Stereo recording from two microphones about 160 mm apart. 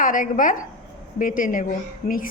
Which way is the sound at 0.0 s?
60° left (ahead or behind).